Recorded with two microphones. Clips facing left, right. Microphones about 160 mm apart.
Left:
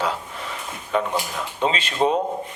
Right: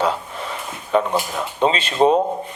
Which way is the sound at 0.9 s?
30° right (ahead or behind).